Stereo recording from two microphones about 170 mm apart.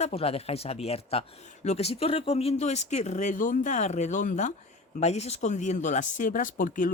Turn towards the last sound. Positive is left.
turn(degrees=50)  # may be behind; listen again after turning